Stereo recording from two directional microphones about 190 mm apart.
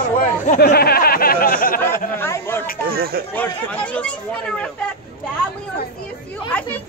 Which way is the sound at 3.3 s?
10° left (ahead or behind).